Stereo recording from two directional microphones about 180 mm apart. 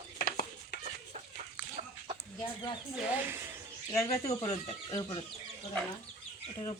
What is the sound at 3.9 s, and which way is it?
Speech, 20° left (ahead or behind).